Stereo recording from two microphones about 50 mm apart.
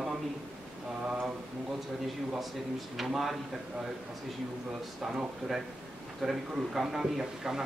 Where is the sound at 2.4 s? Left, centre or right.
Centre.